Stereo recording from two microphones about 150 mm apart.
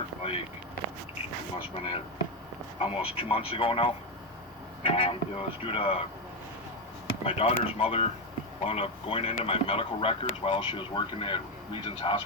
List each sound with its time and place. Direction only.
0.2 s a sound: 40° left (ahead or behind)
2.7 s speech: 40° left (ahead or behind)
7.3 s speech: 40° left (ahead or behind)